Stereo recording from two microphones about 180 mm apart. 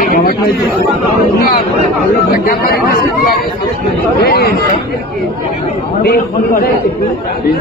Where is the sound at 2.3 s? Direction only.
55° left (ahead or behind).